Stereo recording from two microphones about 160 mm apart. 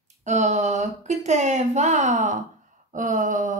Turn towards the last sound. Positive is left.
turn(degrees=-50)  # may be behind; listen again after turning